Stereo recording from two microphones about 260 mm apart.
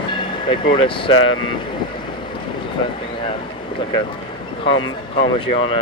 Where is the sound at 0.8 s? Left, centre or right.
Centre.